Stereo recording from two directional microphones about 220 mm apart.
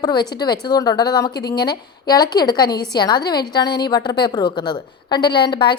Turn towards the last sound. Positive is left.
turn(degrees=20)  # may be behind; listen again after turning